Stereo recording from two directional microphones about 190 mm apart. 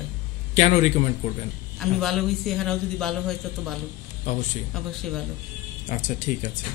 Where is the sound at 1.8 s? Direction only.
Centre (ahead or behind).